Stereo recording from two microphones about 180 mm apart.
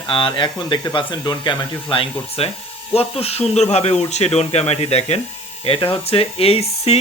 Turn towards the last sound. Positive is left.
turn(degrees=35)  # may be behind; listen again after turning